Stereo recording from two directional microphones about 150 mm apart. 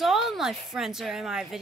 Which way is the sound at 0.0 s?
Centre (ahead or behind).